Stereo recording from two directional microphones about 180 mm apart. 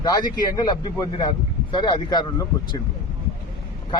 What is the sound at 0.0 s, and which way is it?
A man's voice, 25° left (ahead or behind).